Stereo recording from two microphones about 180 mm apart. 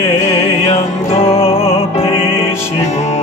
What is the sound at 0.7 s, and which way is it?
Music, 35° left (ahead or behind).